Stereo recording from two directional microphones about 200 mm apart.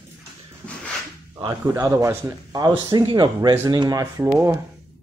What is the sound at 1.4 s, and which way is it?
A man's voice, 15° right (ahead or behind).